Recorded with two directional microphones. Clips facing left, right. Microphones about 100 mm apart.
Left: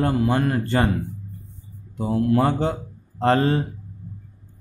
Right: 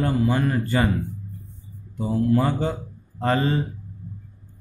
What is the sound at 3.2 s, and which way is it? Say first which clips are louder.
Speech: left 3 dB; 50° left (ahead or behind).